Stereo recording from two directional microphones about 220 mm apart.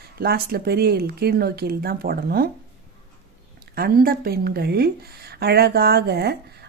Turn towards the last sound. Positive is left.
turn(degrees=-45)  # may be behind; listen again after turning